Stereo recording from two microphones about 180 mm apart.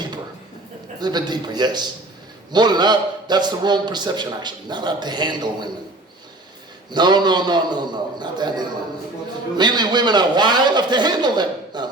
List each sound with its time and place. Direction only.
0.9 s a man's voice: 25° right (ahead or behind)
6.9 s a man's voice: 25° right (ahead or behind)